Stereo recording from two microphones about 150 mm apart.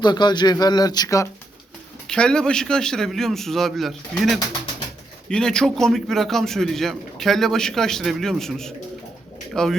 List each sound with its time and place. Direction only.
0.0 s speech: 30° left (ahead or behind)
2.0 s a man's voice: 5° left (ahead or behind)